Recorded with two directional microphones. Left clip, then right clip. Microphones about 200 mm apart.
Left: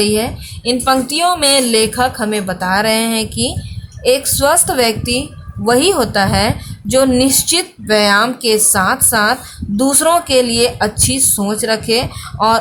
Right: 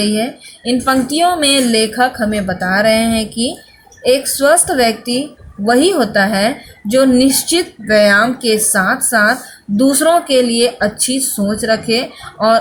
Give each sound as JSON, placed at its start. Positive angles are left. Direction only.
{"t": 0.0, "sound": "a woman's voice", "side_deg": 20}